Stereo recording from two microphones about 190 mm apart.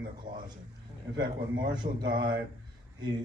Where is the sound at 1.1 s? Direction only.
25° right (ahead or behind).